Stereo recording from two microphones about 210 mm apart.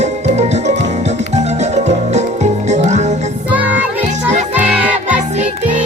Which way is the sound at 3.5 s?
5° right (ahead or behind).